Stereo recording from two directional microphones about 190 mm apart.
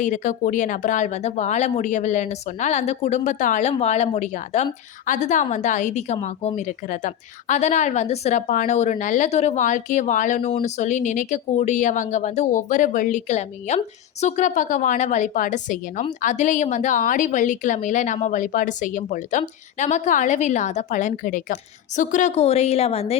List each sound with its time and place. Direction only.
0.0 s speech: 40° left (ahead or behind)